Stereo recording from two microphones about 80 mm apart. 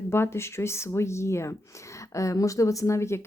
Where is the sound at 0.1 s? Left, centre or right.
Left.